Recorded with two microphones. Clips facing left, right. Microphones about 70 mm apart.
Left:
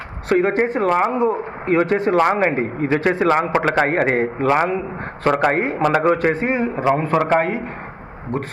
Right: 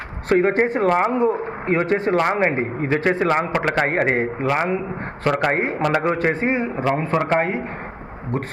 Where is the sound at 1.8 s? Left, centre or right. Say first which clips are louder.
Left 3 dB; right.